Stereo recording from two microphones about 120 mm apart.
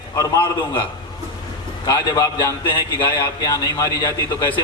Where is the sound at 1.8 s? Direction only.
35° left (ahead or behind).